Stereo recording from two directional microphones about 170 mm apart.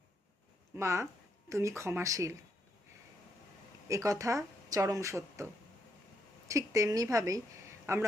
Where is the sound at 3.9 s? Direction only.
20° right (ahead or behind).